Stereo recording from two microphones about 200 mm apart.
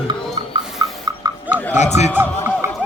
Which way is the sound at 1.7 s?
35° left (ahead or behind).